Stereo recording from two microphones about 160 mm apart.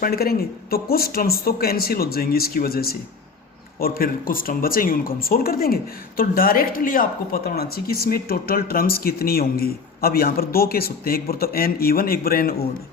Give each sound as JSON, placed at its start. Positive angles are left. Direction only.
{"t": 0.0, "sound": "speech", "side_deg": 70}